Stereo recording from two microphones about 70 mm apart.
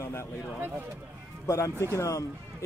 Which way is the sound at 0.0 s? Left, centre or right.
Left.